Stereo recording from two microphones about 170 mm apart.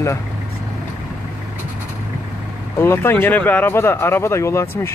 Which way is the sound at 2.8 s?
15° left (ahead or behind).